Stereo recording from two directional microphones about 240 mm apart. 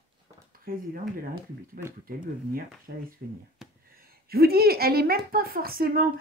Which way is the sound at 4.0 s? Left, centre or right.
Right.